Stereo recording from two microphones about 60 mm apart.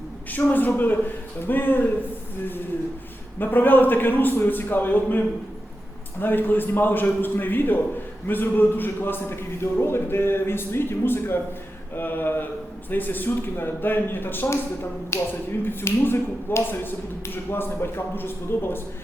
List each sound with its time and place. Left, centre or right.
0.3 s speech: left
3.3 s speech: left
15.1 s speech: left